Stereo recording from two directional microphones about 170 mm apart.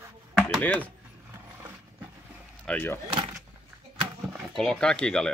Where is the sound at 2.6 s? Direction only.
10° left (ahead or behind).